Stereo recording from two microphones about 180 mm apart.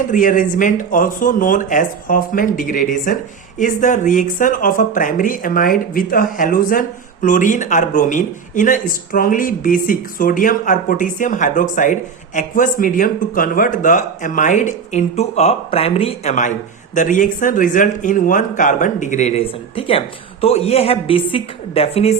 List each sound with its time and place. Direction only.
0.1 s speech: 45° left (ahead or behind)
16.9 s a man's voice: 45° left (ahead or behind)